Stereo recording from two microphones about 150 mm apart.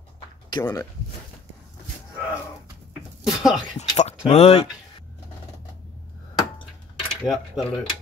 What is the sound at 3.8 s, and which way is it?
Speech, 45° left (ahead or behind).